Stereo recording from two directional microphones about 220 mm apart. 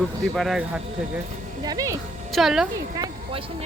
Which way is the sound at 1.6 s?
15° right (ahead or behind).